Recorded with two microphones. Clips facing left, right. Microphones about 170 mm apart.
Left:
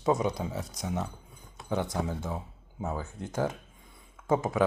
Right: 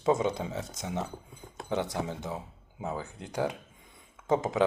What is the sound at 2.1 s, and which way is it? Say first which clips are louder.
Speech: left 1 dB; 20° right (ahead or behind).